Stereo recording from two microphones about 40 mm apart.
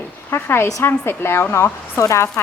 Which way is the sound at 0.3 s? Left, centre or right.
Left.